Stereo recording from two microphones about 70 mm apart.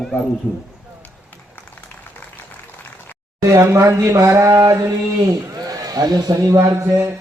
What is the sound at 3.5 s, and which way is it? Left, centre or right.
Speech, right.